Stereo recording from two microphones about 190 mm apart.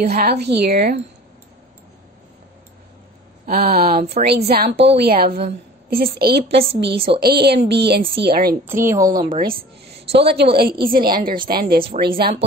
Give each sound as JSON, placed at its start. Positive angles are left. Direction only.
{"t": 0.0, "sound": "a woman's voice", "side_deg": -55}
{"t": 3.4, "sound": "a woman's voice", "side_deg": -50}
{"t": 8.6, "sound": "a woman's voice", "side_deg": -15}
{"t": 9.4, "sound": "a woman's voice", "side_deg": -50}